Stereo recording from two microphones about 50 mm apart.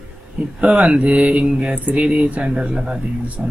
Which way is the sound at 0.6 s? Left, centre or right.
Right.